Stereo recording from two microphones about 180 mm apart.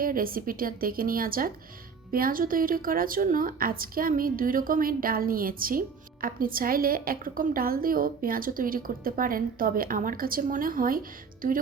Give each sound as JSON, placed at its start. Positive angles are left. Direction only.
{"t": 0.0, "sound": "a woman's voice", "side_deg": -50}